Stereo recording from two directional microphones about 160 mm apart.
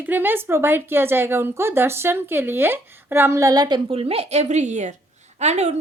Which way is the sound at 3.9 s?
40° right (ahead or behind).